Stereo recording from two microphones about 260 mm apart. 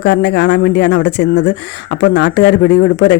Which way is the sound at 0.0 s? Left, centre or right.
Left.